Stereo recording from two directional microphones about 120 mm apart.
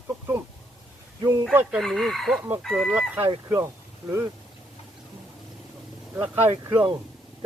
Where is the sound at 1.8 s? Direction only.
Centre (ahead or behind).